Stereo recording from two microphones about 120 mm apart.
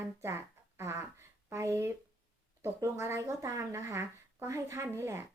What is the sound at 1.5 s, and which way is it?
A woman's voice, 25° right (ahead or behind).